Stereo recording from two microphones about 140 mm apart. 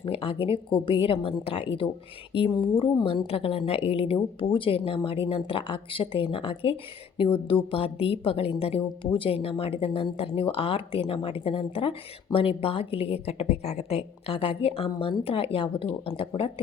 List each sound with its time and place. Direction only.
0.0 s speech: 40° left (ahead or behind)